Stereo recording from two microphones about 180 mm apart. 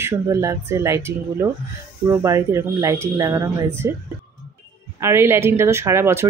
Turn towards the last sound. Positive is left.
turn(degrees=-15)  # may be behind; listen again after turning